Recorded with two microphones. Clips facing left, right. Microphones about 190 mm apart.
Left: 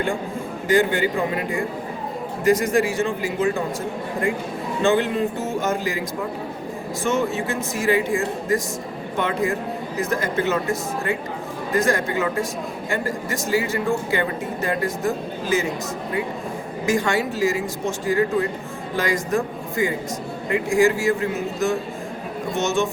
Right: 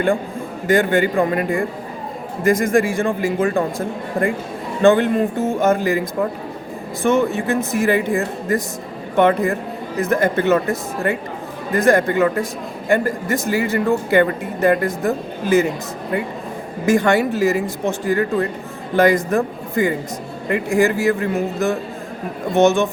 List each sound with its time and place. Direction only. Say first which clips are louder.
0.7 s a man's voice: right 3 dB; 55° right (ahead or behind)
4.8 s a man's voice: right 6 dB; 55° right (ahead or behind)
7.0 s speech: right 6 dB; 55° right (ahead or behind)
16.8 s speech: right 6 dB; 60° right (ahead or behind)